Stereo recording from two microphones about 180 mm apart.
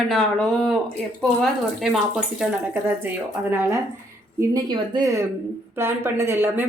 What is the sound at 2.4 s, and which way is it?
A woman's voice, 10° right (ahead or behind).